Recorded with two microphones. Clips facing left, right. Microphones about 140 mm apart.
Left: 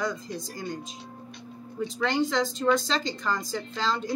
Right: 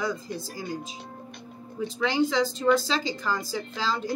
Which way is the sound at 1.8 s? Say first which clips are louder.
Right 1 dB; centre (ahead or behind).